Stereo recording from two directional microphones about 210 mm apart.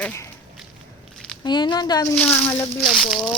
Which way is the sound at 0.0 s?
10° left (ahead or behind).